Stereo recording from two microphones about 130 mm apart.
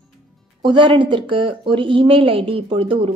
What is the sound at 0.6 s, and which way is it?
Speech, 35° right (ahead or behind).